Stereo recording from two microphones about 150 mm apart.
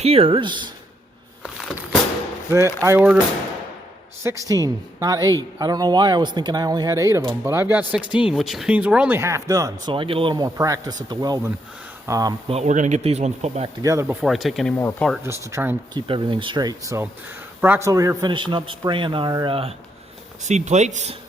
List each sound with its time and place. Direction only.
0.0 s a man's voice: 40° right (ahead or behind)
1.4 s a sound: centre (ahead or behind)
2.8 s speech: 15° right (ahead or behind)
4.2 s speech: 20° right (ahead or behind)
9.9 s speech: 35° right (ahead or behind)
12.5 s speech: 50° right (ahead or behind)
13.8 s speech: 20° right (ahead or behind)
14.2 s speech: centre (ahead or behind)
14.7 s speech: 15° left (ahead or behind)
15.2 s speech: 20° right (ahead or behind)
16.0 s a man's voice: 35° right (ahead or behind)
18.2 s a man's voice: 30° right (ahead or behind)
20.4 s speech: 50° right (ahead or behind)